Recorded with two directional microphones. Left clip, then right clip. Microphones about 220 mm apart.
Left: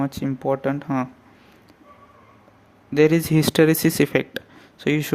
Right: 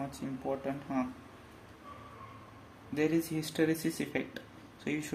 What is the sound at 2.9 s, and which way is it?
Speech, 50° left (ahead or behind).